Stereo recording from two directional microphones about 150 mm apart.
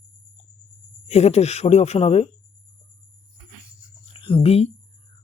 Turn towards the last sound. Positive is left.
turn(degrees=40)  # may be behind; listen again after turning